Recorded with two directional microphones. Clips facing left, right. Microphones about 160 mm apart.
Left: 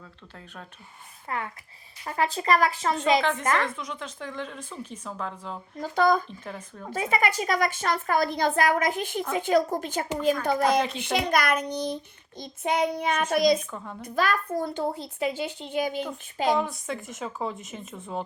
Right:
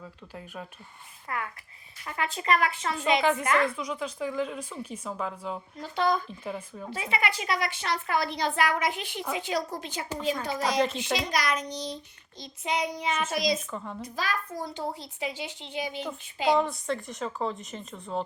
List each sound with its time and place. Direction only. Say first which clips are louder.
0.0 s speech: right 4 dB; 10° right (ahead or behind)
1.3 s speech: left 2 dB; 30° left (ahead or behind)
3.2 s speech: right 1 dB; 5° right (ahead or behind)
5.8 s speech: left 5 dB; 45° left (ahead or behind)
6.2 s speech: right 3 dB; 5° right (ahead or behind)
6.9 s speech: left 5 dB; 45° left (ahead or behind)
10.9 s child singing: left 4 dB; 60° left (ahead or behind)
13.7 s speech: right 1 dB; centre (ahead or behind)
14.0 s speech: left 9 dB; 55° left (ahead or behind)
16.6 s speech: right 2 dB; centre (ahead or behind)